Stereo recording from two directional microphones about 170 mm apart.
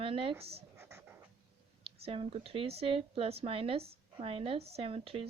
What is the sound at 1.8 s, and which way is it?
A woman's voice, 35° right (ahead or behind).